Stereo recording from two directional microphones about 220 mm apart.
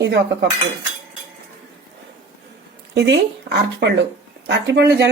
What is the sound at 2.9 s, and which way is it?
Speech, 50° right (ahead or behind).